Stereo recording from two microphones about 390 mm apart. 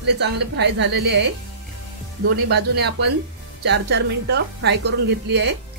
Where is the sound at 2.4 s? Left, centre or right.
Right.